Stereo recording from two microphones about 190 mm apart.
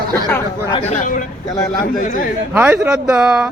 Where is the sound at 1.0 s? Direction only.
45° left (ahead or behind).